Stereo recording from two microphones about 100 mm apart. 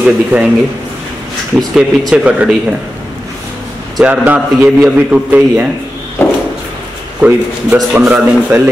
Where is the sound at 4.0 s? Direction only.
10° right (ahead or behind).